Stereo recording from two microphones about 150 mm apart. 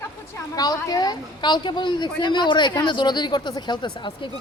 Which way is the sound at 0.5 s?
25° left (ahead or behind).